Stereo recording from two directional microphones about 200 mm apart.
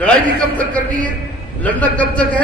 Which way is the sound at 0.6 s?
5° left (ahead or behind).